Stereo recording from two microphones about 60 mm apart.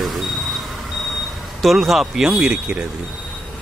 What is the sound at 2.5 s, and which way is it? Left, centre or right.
Speech, right.